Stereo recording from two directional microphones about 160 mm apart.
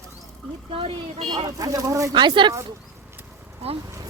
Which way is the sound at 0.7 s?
35° right (ahead or behind).